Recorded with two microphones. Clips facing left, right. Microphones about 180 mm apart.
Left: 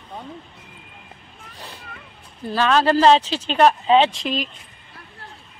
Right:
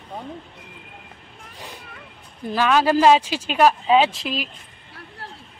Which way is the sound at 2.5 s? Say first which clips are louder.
Left 1 dB; 10° right (ahead or behind).